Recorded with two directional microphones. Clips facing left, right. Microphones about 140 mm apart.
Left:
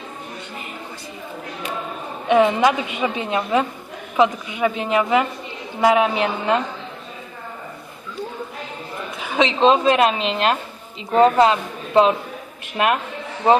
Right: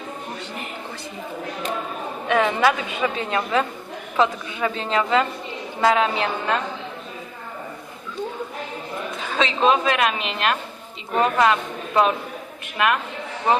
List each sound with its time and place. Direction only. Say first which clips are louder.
2.4 s a woman's voice: left 2 dB; 15° left (ahead or behind)
9.2 s a woman's voice: left 4 dB; 15° left (ahead or behind)
12.7 s a woman's voice: left 2 dB; 30° left (ahead or behind)